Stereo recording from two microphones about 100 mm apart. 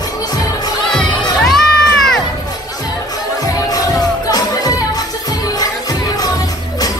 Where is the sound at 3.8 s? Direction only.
40° left (ahead or behind).